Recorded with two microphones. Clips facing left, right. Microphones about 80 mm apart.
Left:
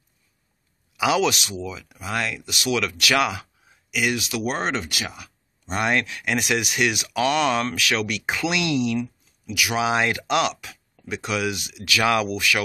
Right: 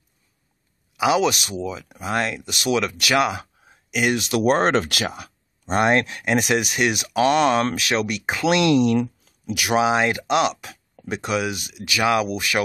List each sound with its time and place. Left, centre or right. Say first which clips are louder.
0.9 s speech: right 2 dB; right
3.6 s a sound: right 3 dB; right
4.5 s speech: right 9 dB; right
5.0 s speech: right 6 dB; right
8.5 s speech: right 8 dB; right
8.9 s a sound: right 5 dB; right
9.5 s speech: right 4 dB; right
9.8 s speech: right 2 dB; right
10.6 s speech: right 3 dB; right